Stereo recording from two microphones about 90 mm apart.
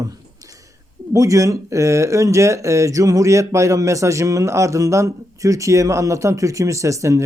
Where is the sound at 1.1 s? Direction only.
35° right (ahead or behind).